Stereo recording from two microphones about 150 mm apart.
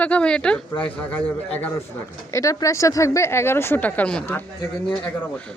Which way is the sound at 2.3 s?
20° left (ahead or behind).